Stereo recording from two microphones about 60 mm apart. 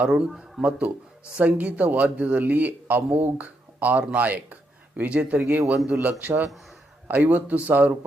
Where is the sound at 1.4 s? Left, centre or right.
Right.